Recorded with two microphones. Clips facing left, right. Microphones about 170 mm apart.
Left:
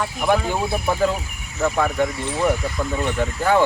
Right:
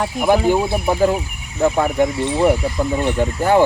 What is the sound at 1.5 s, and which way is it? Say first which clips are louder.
Speech: right 4 dB; 25° right (ahead or behind).